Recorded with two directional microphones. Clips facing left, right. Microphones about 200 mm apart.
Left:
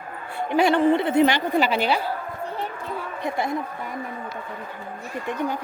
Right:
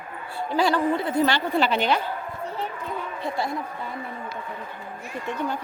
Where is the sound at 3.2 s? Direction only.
20° left (ahead or behind).